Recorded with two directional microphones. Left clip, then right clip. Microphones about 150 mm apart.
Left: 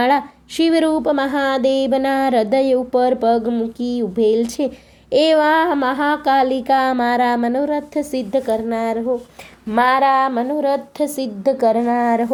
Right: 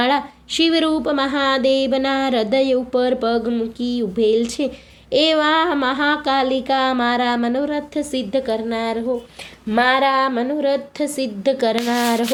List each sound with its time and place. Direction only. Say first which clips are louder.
0.0 s speech: left 2 dB; 25° left (ahead or behind)
5.1 s a sound: left 2 dB; 30° left (ahead or behind)
11.9 s a woman's voice: left 2 dB; centre (ahead or behind)